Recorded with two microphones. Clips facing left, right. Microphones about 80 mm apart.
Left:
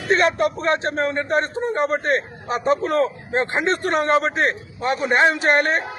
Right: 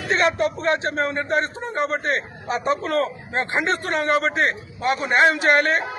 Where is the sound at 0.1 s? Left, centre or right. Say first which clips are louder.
Left 2 dB; left.